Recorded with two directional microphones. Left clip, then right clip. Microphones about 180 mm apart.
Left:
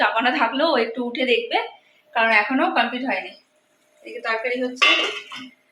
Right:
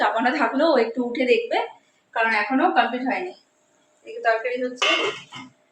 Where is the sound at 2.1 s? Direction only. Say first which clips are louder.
Left 3 dB; 25° left (ahead or behind).